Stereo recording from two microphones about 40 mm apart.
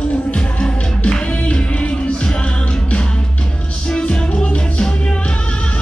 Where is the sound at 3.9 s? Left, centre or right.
Left.